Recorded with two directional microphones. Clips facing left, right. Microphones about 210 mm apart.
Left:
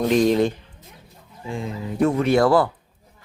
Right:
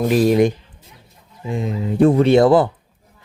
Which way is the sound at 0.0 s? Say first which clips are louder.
Right 3 dB; 10° right (ahead or behind).